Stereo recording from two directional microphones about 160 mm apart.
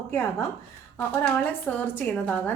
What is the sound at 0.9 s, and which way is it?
A woman's voice, 10° left (ahead or behind).